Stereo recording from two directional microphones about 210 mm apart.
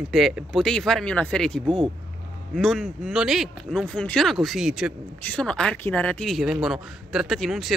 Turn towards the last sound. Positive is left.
turn(degrees=0)  # may be behind; listen again after turning